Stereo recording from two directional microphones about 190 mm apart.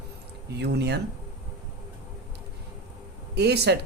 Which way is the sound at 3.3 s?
60° right (ahead or behind).